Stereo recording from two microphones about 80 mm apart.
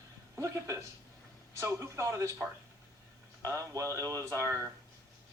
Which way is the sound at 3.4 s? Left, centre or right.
Right.